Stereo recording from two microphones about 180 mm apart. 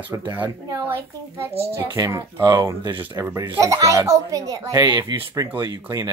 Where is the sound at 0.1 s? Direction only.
10° right (ahead or behind).